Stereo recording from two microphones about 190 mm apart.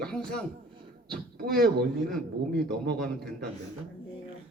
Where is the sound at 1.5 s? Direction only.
55° right (ahead or behind).